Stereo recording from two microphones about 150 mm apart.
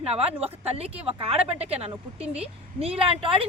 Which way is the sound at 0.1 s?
45° right (ahead or behind).